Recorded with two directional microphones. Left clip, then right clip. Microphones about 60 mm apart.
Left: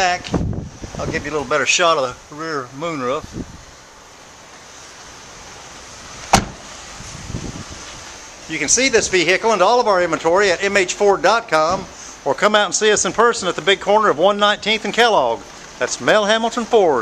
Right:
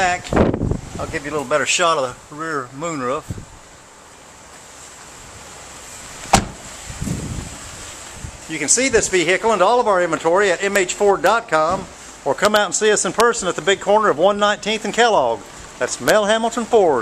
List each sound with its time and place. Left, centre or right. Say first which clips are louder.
0.0 s speech: right 2 dB; left
6.3 s vehicle: left 1 dB; centre
8.6 s speech: left 1 dB; centre
12.7 s speech: left 1 dB; centre